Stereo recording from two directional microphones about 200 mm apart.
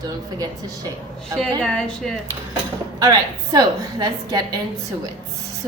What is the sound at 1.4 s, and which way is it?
Speech, 5° left (ahead or behind).